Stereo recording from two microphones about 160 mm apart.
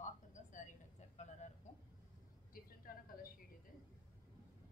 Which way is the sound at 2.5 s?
65° left (ahead or behind).